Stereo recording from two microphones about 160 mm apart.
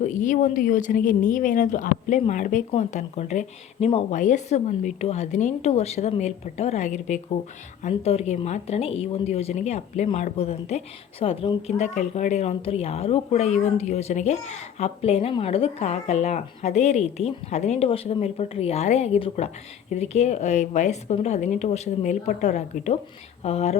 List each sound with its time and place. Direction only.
0.0 s a woman's voice: 50° left (ahead or behind)